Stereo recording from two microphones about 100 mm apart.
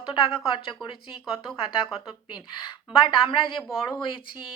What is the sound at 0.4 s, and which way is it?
Speech, 55° left (ahead or behind).